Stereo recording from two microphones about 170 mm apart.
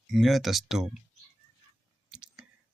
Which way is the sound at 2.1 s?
5° right (ahead or behind).